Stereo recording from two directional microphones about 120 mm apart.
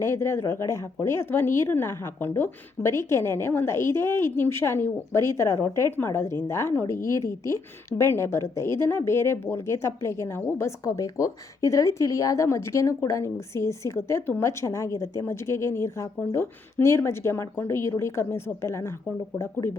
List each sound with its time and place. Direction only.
0.0 s a woman's voice: 20° left (ahead or behind)